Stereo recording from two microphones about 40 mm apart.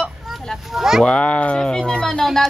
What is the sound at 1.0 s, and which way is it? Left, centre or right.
Speech, centre.